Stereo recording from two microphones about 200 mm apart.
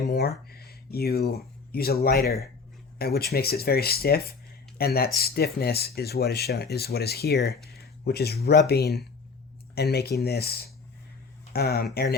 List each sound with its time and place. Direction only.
0.1 s speech: 50° left (ahead or behind)
2.2 s speech: centre (ahead or behind)
3.0 s speech: 50° left (ahead or behind)
7.7 s a sound: 50° left (ahead or behind)
8.4 s speech: 55° left (ahead or behind)